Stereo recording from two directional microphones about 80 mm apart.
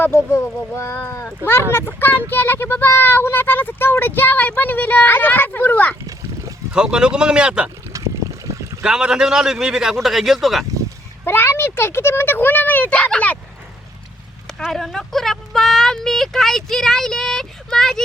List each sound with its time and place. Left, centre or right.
0.0 s speech: left
6.7 s a man's voice: centre
7.9 s boat: right
8.8 s a man's voice: centre
11.3 s speech: left
14.6 s speech: centre